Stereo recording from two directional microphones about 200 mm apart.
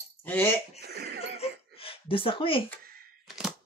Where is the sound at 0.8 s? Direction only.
55° right (ahead or behind).